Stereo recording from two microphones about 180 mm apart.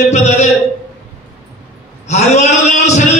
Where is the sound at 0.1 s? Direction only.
40° left (ahead or behind).